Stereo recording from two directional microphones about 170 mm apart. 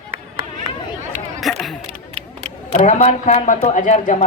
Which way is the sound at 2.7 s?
45° left (ahead or behind).